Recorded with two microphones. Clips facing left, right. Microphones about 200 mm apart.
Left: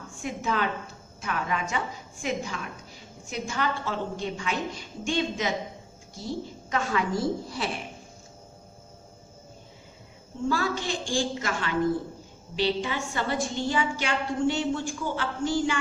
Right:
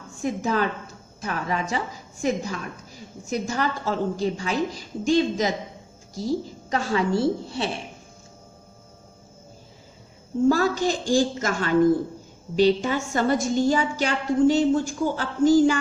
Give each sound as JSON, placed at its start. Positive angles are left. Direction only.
{"t": 0.2, "sound": "a woman's voice", "side_deg": -40}
{"t": 10.5, "sound": "a woman's voice", "side_deg": -40}